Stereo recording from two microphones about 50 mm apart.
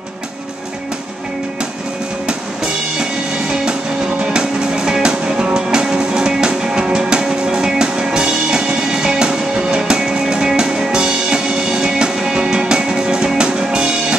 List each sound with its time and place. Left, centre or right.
4.2 s music: centre